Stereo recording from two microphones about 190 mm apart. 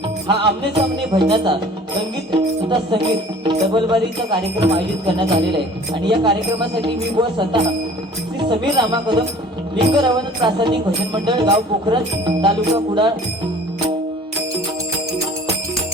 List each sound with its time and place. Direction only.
0.3 s music: 25° right (ahead or behind)